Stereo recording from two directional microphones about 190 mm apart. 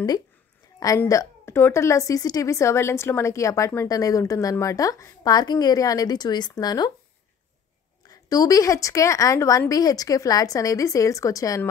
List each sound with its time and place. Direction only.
0.7 s a woman's voice: 15° left (ahead or behind)
8.1 s a woman's voice: 20° left (ahead or behind)